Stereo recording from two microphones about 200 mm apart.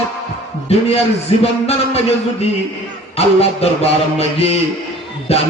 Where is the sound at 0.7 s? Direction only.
30° left (ahead or behind).